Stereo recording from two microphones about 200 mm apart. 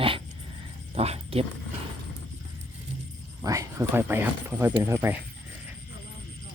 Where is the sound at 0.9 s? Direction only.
30° right (ahead or behind).